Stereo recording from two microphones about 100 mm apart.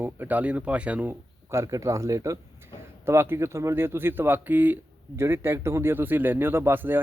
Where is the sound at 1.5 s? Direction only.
30° right (ahead or behind).